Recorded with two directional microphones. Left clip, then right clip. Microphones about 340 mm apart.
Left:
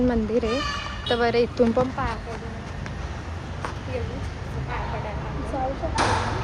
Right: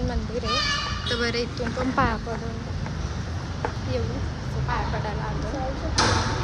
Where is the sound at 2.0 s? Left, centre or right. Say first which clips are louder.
Right 5 dB; right.